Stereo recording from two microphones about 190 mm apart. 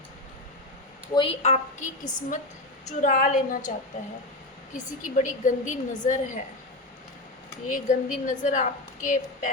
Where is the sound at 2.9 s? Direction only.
40° left (ahead or behind).